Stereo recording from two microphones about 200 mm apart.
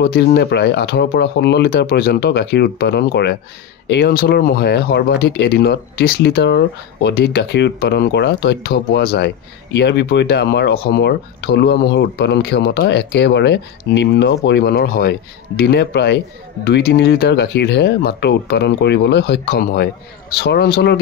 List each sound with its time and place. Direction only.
0.0 s speech: 50° left (ahead or behind)